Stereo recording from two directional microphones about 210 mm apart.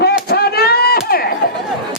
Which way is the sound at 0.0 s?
50° left (ahead or behind).